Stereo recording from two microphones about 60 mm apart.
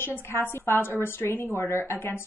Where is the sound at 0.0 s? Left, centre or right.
Left.